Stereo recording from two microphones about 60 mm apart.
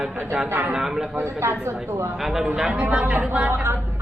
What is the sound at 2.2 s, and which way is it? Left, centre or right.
Speech, centre.